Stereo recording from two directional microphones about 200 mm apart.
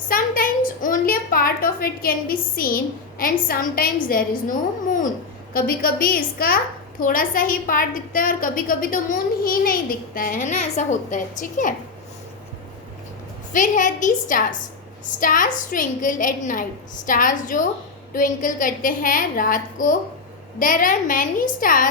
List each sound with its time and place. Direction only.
0.1 s a child's voice: 45° left (ahead or behind)
0.8 s a sound: 45° left (ahead or behind)
3.4 s a woman's voice: 45° left (ahead or behind)
13.5 s a woman's voice: 40° left (ahead or behind)